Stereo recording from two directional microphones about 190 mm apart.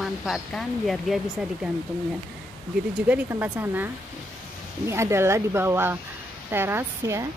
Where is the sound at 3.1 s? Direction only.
10° right (ahead or behind).